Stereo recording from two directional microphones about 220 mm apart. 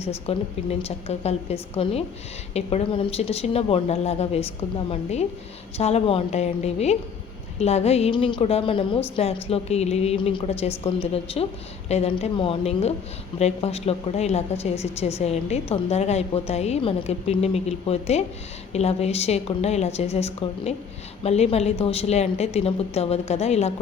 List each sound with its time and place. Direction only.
0.0 s a woman's voice: 30° left (ahead or behind)